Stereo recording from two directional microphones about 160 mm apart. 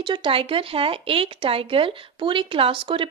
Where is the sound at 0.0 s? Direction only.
30° right (ahead or behind).